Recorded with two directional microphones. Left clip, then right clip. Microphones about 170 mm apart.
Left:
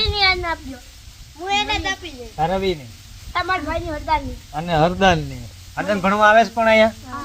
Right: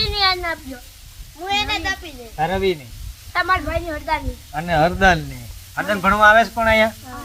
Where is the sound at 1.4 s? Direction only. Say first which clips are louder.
Even; 25° right (ahead or behind).